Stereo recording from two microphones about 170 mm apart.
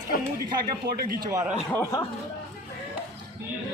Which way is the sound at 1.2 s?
20° right (ahead or behind).